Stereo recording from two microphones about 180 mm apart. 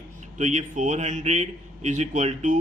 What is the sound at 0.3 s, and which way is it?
Speech, 40° right (ahead or behind).